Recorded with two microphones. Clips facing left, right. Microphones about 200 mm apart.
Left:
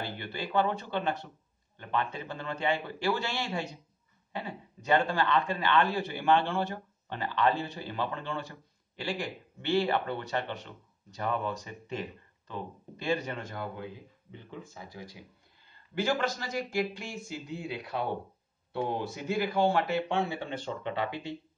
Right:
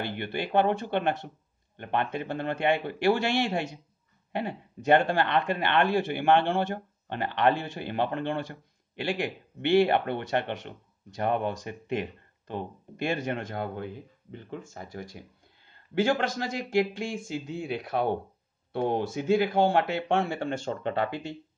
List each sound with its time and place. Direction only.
0.0 s speech: 60° right (ahead or behind)
14.3 s speech: 50° right (ahead or behind)